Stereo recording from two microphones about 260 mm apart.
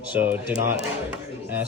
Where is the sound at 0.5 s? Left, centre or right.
Right.